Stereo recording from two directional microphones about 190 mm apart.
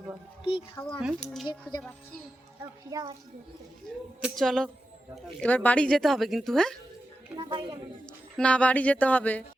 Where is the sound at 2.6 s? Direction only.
20° right (ahead or behind).